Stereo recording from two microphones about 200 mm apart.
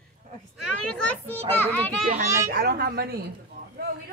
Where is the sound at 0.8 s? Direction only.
5° left (ahead or behind).